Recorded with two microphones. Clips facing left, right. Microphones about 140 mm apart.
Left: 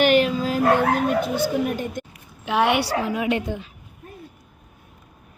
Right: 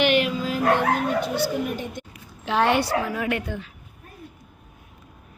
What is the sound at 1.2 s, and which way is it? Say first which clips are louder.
Speech: left 2 dB; 50° left (ahead or behind).